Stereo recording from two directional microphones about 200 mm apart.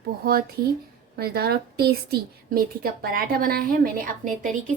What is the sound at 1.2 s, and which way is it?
A woman's voice, 50° right (ahead or behind).